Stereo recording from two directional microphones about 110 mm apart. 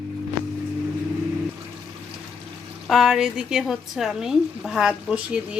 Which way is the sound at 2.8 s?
5° right (ahead or behind).